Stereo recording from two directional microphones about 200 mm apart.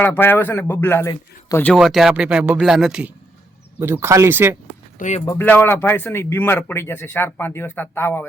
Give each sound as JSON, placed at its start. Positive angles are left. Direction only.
{"t": 0.0, "sound": "speech", "side_deg": 10}
{"t": 1.8, "sound": "speech", "side_deg": 0}
{"t": 4.9, "sound": "speech", "side_deg": 35}
{"t": 5.2, "sound": "speech", "side_deg": 15}